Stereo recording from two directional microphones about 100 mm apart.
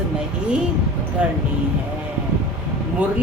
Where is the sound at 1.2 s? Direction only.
10° right (ahead or behind).